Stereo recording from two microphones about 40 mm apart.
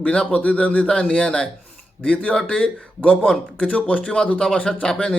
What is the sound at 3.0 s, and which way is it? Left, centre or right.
A man's voice, left.